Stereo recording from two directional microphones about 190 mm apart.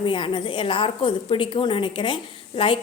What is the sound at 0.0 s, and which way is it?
A woman's voice, 25° left (ahead or behind).